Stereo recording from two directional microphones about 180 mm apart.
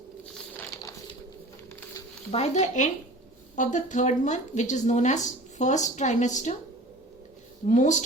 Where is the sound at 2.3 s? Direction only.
40° left (ahead or behind).